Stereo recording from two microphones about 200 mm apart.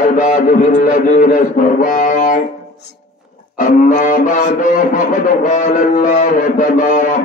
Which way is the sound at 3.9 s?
40° left (ahead or behind).